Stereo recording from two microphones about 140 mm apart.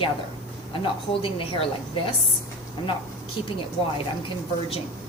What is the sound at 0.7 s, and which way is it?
Speech, 40° left (ahead or behind).